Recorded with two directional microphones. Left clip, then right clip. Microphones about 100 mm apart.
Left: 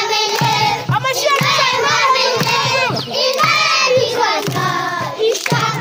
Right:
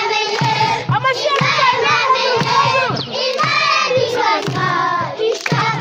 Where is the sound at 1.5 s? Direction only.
20° right (ahead or behind).